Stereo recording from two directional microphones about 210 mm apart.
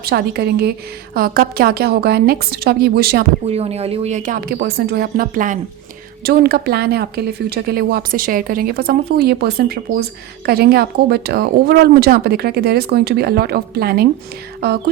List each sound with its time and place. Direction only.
0.0 s speech: 50° right (ahead or behind)
3.4 s speech: 30° right (ahead or behind); by 14.1 s 50° right (ahead or behind)